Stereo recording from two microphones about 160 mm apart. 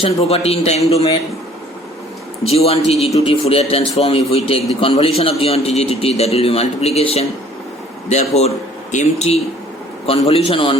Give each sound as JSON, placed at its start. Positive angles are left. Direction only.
{"t": 0.0, "sound": "a man's voice", "side_deg": 40}
{"t": 2.4, "sound": "a man's voice", "side_deg": 40}